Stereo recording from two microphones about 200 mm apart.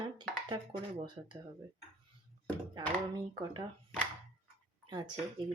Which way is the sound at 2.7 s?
20° right (ahead or behind).